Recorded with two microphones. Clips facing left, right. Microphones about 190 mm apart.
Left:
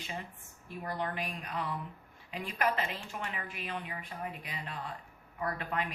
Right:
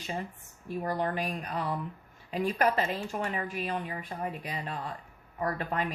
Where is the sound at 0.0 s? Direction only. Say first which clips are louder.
Right 6 dB; 40° right (ahead or behind).